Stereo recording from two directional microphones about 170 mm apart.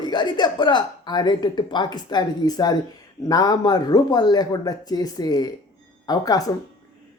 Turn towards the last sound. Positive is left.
turn(degrees=20)  # may be behind; listen again after turning